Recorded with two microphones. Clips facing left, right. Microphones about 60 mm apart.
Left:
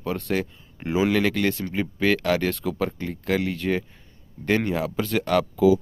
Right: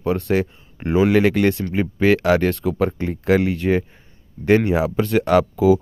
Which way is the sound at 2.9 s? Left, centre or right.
Right.